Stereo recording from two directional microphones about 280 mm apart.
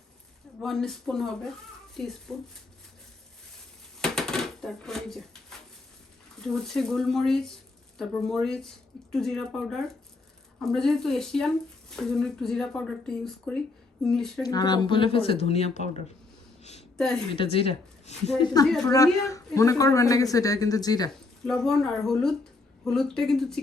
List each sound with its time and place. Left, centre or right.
0.6 s speech: centre
4.0 s a sound: centre
6.4 s speech: centre
14.4 s speech: centre
17.0 s speech: centre
17.3 s speech: centre
21.4 s speech: centre